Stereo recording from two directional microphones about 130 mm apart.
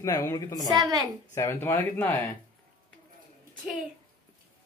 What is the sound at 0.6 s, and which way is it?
Speech, 30° right (ahead or behind).